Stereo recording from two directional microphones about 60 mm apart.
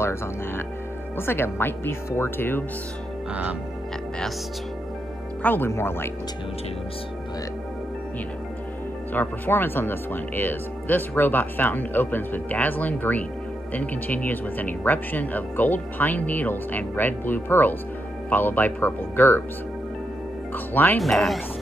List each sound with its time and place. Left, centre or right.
0.0 s speech: left
5.4 s speech: left
5.7 s speech: left
9.1 s speech: left
20.5 s speech: left
21.0 s speech: centre